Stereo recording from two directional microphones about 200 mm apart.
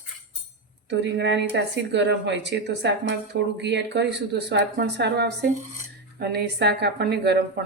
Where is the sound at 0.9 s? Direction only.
60° right (ahead or behind).